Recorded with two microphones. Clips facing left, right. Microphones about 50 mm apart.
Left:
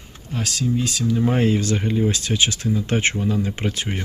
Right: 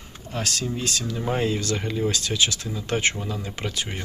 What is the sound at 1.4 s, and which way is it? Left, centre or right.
Speech, left.